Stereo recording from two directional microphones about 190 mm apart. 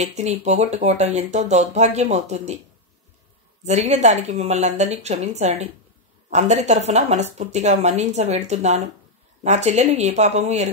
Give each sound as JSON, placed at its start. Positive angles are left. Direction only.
{"t": 0.0, "sound": "speech", "side_deg": -35}
{"t": 3.6, "sound": "speech", "side_deg": -35}